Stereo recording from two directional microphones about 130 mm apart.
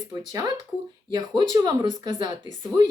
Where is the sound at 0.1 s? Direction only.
30° right (ahead or behind).